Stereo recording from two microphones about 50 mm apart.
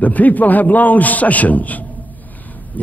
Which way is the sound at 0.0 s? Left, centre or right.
Left.